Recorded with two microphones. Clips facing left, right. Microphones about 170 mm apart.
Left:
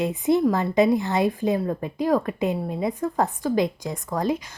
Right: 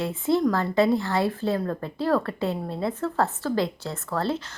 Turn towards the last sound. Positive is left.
turn(degrees=15)  # may be behind; listen again after turning